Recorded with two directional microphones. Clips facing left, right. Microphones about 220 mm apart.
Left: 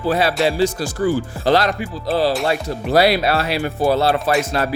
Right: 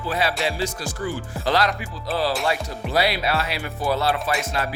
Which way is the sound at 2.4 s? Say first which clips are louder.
Left 5 dB; 40° left (ahead or behind).